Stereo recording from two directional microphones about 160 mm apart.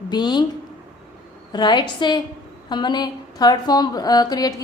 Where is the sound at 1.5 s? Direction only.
30° left (ahead or behind).